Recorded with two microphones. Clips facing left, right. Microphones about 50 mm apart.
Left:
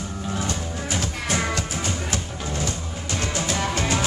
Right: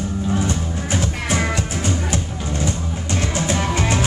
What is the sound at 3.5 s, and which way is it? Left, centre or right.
Music, right.